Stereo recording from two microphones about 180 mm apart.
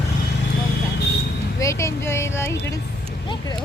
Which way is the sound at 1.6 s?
15° left (ahead or behind).